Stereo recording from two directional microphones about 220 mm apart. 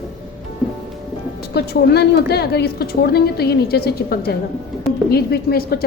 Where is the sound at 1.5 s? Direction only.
45° left (ahead or behind).